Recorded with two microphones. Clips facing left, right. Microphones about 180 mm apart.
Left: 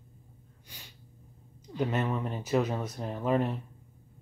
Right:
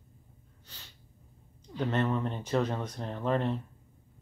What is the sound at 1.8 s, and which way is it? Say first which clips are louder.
Speech: right 1 dB; 10° left (ahead or behind).